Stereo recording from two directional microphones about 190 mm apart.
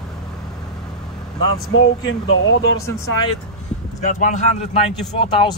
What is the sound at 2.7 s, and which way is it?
Speech, 15° left (ahead or behind).